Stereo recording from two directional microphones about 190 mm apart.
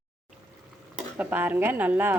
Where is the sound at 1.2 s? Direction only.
10° right (ahead or behind).